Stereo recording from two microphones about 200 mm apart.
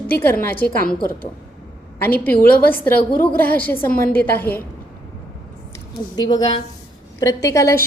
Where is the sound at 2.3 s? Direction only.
50° left (ahead or behind).